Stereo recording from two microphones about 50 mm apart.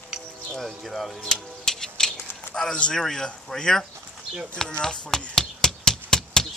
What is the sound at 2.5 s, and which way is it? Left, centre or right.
Speech, centre.